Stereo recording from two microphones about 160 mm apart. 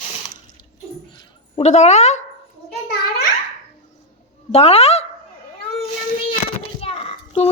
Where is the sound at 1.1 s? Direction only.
40° left (ahead or behind).